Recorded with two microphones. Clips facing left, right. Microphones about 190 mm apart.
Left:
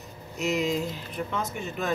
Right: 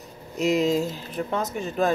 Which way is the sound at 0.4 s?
35° right (ahead or behind).